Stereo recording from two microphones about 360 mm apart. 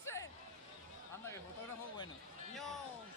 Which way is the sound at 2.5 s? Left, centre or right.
Centre.